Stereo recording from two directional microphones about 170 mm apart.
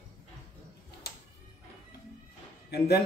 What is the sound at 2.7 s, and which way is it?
Speech, 70° left (ahead or behind).